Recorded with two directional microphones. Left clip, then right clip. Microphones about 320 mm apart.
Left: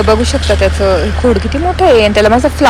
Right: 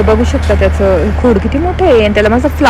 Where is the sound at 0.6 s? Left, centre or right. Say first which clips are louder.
Right 2 dB; centre.